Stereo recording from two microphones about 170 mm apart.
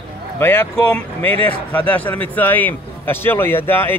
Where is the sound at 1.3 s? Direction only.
35° right (ahead or behind).